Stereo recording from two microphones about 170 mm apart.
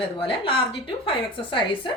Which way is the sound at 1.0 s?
30° left (ahead or behind).